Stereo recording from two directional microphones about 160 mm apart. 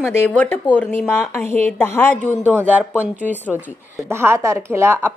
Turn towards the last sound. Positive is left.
turn(degrees=-15)  # may be behind; listen again after turning